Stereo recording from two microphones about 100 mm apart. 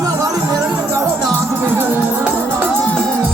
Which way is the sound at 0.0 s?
35° right (ahead or behind).